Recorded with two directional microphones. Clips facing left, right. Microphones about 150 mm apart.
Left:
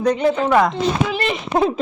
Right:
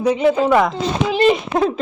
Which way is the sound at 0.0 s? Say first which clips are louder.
Right 2 dB; 5° right (ahead or behind).